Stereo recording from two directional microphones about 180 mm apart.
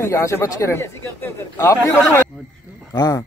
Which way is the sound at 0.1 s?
15° left (ahead or behind).